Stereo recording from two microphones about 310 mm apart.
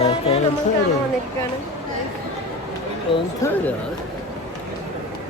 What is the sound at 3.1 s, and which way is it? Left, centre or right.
Speech, centre.